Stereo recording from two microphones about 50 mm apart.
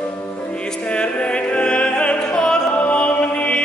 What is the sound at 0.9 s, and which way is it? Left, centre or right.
Music, left.